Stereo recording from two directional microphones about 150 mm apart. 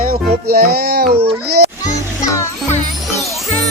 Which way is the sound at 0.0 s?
85° right.